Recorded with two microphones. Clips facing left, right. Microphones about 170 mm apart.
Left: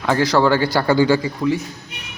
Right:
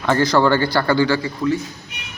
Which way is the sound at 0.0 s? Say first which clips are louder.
Even; 5° left (ahead or behind).